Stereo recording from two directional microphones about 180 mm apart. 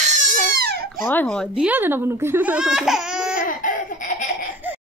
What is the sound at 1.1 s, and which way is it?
Speech, 5° left (ahead or behind).